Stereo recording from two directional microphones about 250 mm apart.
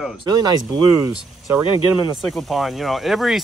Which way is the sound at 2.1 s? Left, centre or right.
Centre.